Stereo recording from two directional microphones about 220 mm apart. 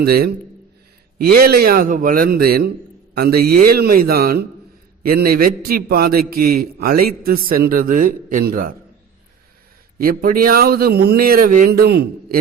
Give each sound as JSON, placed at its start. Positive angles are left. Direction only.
{"t": 0.0, "sound": "a man's voice", "side_deg": -45}
{"t": 10.0, "sound": "a man's voice", "side_deg": -40}